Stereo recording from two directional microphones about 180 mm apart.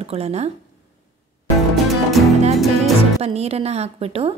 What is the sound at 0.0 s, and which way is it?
Speech, 35° right (ahead or behind).